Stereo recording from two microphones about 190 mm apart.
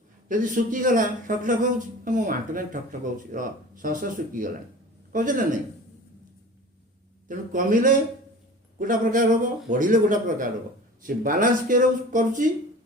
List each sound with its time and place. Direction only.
0.3 s speech: 45° right (ahead or behind)
7.3 s speech: 45° right (ahead or behind)